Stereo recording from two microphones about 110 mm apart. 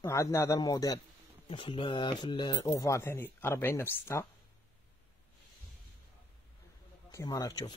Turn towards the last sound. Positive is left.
turn(degrees=35)  # may be behind; listen again after turning